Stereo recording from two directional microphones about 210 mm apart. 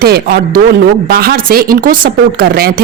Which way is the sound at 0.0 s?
45° right (ahead or behind).